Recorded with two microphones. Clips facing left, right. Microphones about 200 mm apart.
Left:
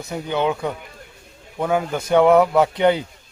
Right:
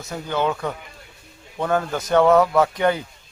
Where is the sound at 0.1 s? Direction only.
15° left (ahead or behind).